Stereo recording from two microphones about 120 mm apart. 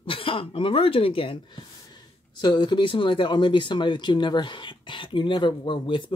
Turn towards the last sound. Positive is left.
turn(degrees=40)  # may be behind; listen again after turning